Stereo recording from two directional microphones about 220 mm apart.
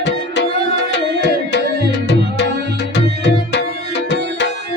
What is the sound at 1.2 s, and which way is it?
Tabla, 50° left (ahead or behind).